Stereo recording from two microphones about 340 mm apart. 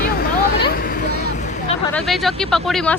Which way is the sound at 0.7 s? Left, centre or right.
Left.